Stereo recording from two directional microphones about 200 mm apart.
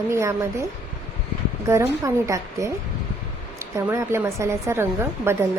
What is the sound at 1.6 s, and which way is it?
A woman's voice, 15° right (ahead or behind).